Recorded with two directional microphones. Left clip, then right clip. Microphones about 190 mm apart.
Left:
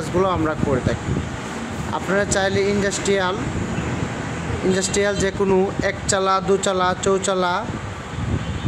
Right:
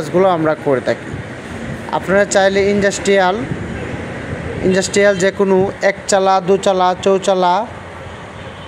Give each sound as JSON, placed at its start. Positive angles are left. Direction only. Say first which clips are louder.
{"t": 0.0, "sound": "speech", "louder": "right 7 dB", "side_deg": -20}
{"t": 4.7, "sound": "speech", "louder": "right 10 dB", "side_deg": -25}